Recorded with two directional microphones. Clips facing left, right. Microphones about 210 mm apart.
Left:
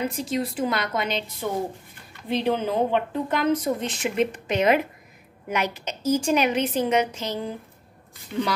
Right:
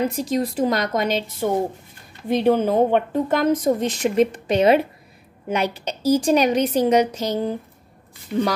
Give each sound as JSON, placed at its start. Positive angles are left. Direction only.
{"t": 0.1, "sound": "a woman's voice", "side_deg": -40}